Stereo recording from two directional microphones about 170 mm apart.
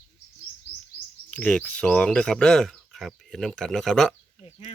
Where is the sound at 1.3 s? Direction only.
5° left (ahead or behind).